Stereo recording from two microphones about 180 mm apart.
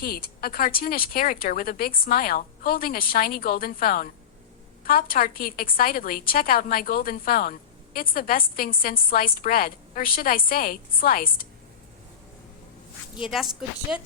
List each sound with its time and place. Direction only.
0.0 s a woman's voice: 55° left (ahead or behind)
13.9 s speech: 5° right (ahead or behind)